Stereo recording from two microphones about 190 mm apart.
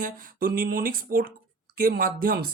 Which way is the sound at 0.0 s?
50° right (ahead or behind).